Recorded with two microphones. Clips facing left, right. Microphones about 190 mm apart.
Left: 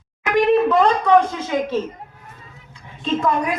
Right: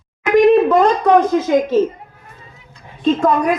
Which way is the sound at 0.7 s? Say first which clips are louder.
Right 3 dB; 45° right (ahead or behind).